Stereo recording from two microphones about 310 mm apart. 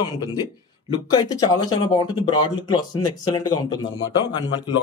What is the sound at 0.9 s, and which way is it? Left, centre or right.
Speech, centre.